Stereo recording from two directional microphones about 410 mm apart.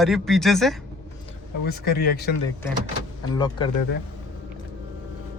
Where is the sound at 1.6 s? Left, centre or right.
Left.